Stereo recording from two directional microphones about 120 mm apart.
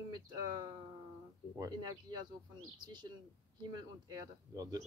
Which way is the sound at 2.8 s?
40° right (ahead or behind).